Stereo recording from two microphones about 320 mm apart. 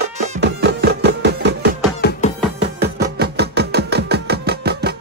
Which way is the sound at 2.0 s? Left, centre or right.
Left.